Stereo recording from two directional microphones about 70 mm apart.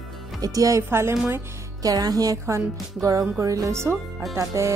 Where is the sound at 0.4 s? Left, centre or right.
Right.